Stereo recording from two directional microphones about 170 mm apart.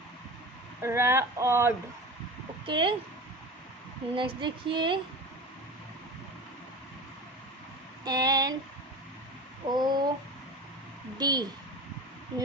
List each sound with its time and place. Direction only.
0.8 s speech: 15° right (ahead or behind)
2.6 s female singing: 30° right (ahead or behind)
4.1 s female singing: 30° right (ahead or behind)
8.0 s female singing: 20° right (ahead or behind)
9.6 s female singing: 25° right (ahead or behind)
11.2 s female singing: 25° right (ahead or behind)